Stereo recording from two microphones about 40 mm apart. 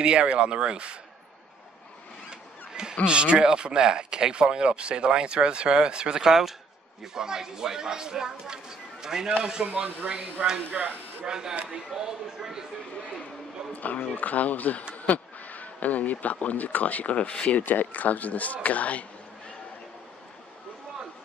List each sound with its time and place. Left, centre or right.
0.0 s speech: right
2.7 s a sound: centre
3.1 s speech: right
6.2 s speech: centre
10.7 s speech: right
11.2 s speech: centre
13.7 s speech: left
17.6 s speech: left